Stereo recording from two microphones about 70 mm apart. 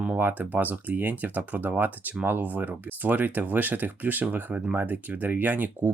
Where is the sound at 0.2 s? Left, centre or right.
Right.